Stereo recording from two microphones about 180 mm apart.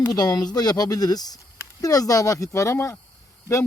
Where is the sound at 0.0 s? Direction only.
20° left (ahead or behind).